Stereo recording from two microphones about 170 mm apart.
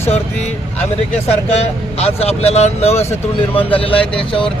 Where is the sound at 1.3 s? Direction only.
40° left (ahead or behind).